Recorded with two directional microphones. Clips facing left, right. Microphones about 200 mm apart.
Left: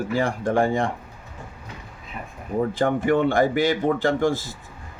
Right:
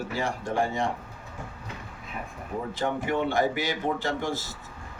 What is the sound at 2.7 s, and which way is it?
Speech, 55° left (ahead or behind).